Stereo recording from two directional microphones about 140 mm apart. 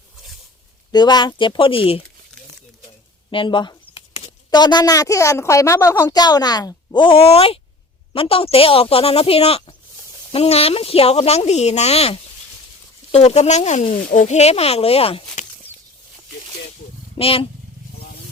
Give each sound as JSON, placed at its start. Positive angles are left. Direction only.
{"t": 0.9, "sound": "speech", "side_deg": 30}
{"t": 3.2, "sound": "a sound", "side_deg": 35}
{"t": 4.5, "sound": "a woman's voice", "side_deg": 30}
{"t": 17.2, "sound": "speech", "side_deg": 40}